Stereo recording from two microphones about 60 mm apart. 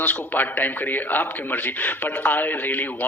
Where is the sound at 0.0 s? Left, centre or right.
Left.